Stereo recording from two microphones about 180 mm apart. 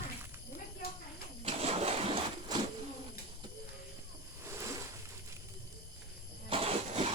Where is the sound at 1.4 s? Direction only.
35° right (ahead or behind).